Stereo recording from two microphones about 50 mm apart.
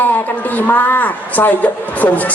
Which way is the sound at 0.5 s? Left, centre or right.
Left.